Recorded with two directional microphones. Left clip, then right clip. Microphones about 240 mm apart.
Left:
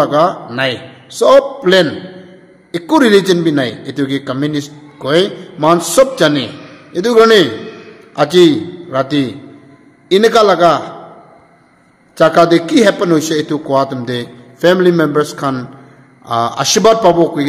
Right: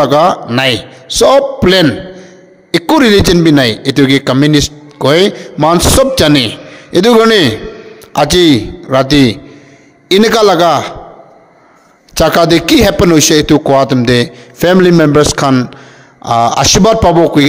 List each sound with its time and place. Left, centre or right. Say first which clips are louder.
0.0 s a man's voice: right 4 dB; right
12.1 s a man's voice: right 1 dB; right